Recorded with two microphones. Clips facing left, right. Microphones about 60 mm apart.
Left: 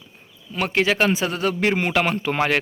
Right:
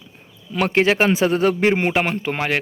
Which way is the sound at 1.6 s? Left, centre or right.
Right.